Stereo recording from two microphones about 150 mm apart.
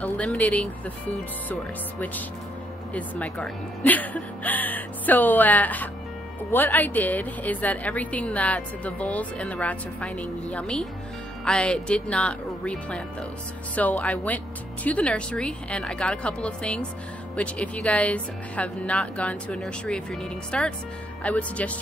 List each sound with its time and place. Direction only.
0.0 s a woman's voice: 10° left (ahead or behind)